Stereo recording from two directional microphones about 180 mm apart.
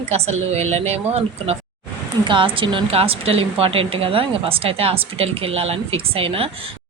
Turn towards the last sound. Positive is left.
turn(degrees=-30)  # may be behind; listen again after turning